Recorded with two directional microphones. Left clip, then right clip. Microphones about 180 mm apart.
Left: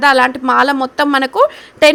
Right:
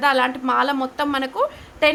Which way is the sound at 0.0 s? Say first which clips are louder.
Left 8 dB; 35° left (ahead or behind).